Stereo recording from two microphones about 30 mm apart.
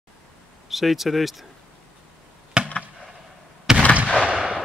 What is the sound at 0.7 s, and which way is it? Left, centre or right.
Speech, centre.